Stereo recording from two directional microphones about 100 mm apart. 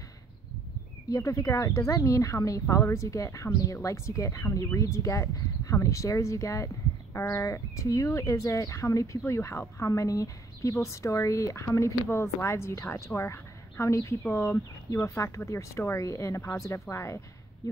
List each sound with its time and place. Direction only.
1.0 s speech: 35° left (ahead or behind)